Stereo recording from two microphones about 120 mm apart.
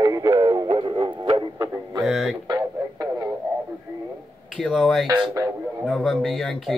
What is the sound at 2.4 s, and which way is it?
Radio, 30° right (ahead or behind).